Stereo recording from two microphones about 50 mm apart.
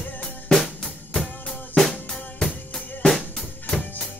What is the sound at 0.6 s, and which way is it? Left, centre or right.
Drum kit, centre.